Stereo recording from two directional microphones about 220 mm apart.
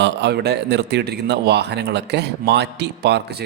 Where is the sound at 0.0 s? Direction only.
50° right (ahead or behind).